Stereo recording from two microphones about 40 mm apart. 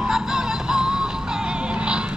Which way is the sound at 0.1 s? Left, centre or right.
Centre.